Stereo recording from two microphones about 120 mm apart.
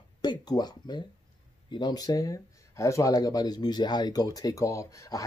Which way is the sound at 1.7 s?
35° left (ahead or behind).